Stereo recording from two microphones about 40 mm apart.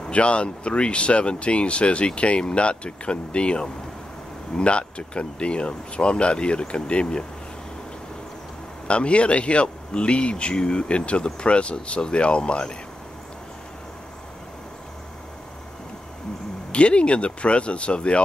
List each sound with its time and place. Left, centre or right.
0.1 s speech: left
8.8 s speech: left
16.7 s speech: left